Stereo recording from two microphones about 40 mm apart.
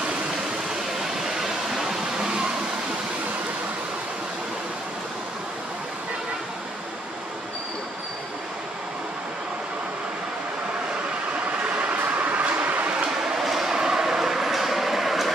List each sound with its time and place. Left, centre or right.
1.2 s waterfall: centre
2.1 s a sound: right
11.3 s train: right
13.4 s train: centre